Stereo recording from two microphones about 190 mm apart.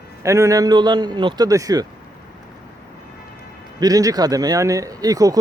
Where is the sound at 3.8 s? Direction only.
20° right (ahead or behind).